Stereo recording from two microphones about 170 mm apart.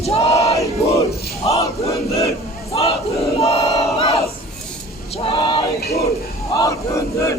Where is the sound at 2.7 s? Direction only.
35° left (ahead or behind).